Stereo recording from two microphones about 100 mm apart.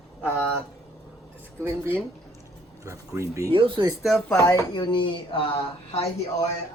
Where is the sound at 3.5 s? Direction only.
60° right (ahead or behind).